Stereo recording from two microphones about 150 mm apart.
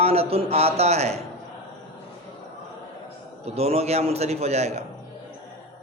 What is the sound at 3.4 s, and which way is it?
A man's voice, 45° right (ahead or behind).